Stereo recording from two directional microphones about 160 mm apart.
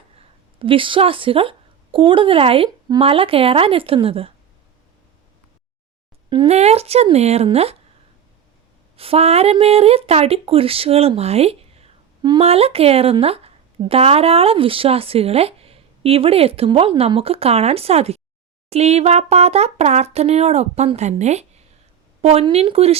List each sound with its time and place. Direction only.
0.2 s a woman's voice: 35° right (ahead or behind)
6.3 s speech: 35° right (ahead or behind)
9.0 s speech: 40° right (ahead or behind)